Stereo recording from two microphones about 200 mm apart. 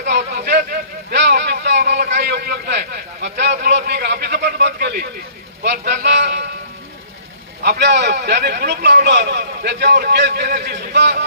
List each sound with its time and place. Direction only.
0.0 s a sound: 55° right (ahead or behind)
5.6 s a man's voice: 55° right (ahead or behind)
7.6 s a man's voice: 55° right (ahead or behind)